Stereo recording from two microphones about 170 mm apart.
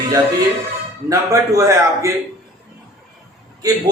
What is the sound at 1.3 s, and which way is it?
Speech, 20° right (ahead or behind).